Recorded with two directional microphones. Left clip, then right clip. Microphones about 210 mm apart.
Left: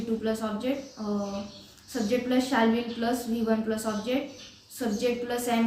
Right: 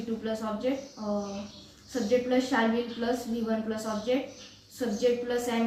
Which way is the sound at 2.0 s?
20° left (ahead or behind).